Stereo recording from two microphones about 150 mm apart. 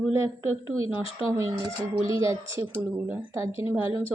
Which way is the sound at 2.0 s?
35° left (ahead or behind).